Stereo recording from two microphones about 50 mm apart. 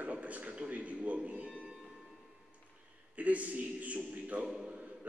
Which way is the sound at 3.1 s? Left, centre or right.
Right.